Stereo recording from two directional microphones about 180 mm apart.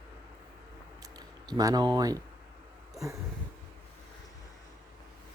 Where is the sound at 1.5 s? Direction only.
20° right (ahead or behind).